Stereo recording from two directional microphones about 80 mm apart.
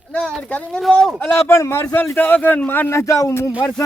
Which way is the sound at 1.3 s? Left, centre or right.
Left.